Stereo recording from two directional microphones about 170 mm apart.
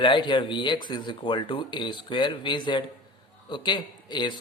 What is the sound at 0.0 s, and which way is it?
Speech, 30° left (ahead or behind).